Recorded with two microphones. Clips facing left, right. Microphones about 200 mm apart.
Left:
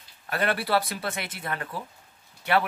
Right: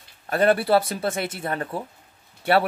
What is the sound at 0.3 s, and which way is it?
Speech, 30° right (ahead or behind).